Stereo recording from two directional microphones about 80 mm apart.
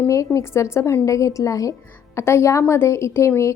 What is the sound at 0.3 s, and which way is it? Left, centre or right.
A woman's voice, left.